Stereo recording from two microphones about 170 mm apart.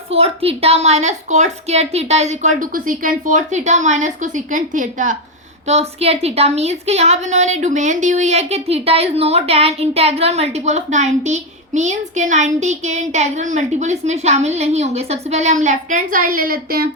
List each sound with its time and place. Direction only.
0.1 s a woman's voice: 35° right (ahead or behind)
5.6 s a woman's voice: 40° right (ahead or behind); by 16.9 s 60° right (ahead or behind)